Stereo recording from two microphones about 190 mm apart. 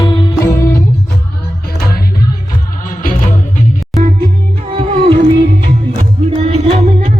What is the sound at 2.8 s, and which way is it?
Music, 45° left (ahead or behind).